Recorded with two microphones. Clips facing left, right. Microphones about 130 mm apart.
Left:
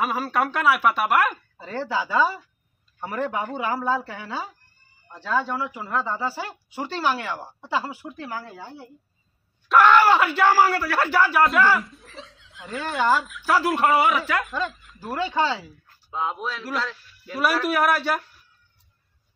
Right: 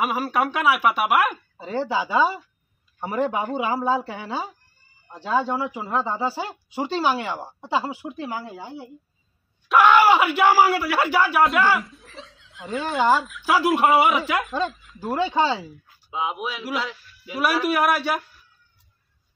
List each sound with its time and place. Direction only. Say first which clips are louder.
0.0 s a man's voice: right 1 dB; 10° right (ahead or behind)
13.9 s speech: right 2 dB; 20° right (ahead or behind)
14.7 s speech: right 5 dB; centre (ahead or behind)
15.1 s speech: right 2 dB; 20° right (ahead or behind)
15.9 s a man's voice: right 1 dB; 10° right (ahead or behind)